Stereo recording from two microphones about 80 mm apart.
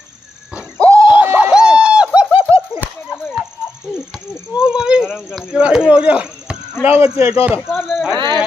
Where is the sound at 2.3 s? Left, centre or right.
Right.